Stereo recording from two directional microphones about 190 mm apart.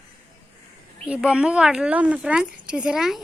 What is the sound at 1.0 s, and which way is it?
Speech, 5° right (ahead or behind).